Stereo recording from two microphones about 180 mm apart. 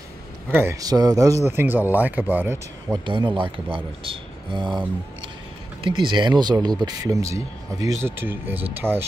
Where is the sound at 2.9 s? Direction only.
25° right (ahead or behind).